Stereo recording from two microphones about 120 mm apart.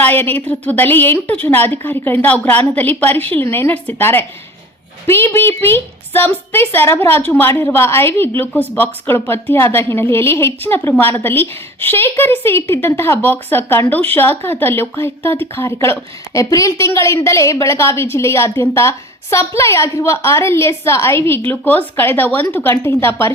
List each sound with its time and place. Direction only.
0.0 s a woman's voice: 15° left (ahead or behind)